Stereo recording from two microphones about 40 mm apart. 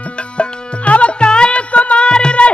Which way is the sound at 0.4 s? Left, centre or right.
Left.